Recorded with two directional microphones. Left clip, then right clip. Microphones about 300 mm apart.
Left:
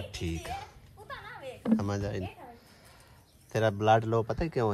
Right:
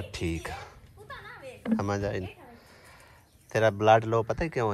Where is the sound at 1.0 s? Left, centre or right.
Left.